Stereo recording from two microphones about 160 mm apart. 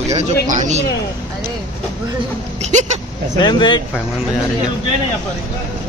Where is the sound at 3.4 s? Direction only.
30° left (ahead or behind).